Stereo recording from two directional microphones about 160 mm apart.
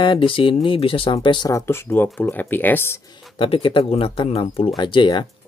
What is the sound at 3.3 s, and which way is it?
Speech, 35° left (ahead or behind).